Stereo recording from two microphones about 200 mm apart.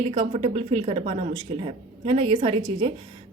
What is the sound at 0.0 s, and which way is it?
A woman's voice, 25° right (ahead or behind).